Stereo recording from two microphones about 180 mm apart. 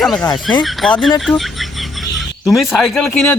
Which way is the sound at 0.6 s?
Centre (ahead or behind).